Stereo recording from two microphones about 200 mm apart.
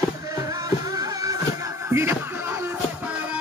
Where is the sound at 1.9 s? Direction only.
15° right (ahead or behind).